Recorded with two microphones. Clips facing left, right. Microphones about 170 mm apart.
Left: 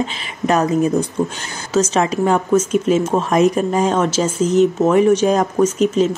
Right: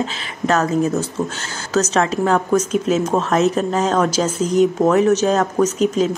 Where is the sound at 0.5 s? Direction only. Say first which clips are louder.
Left 2 dB; 15° left (ahead or behind).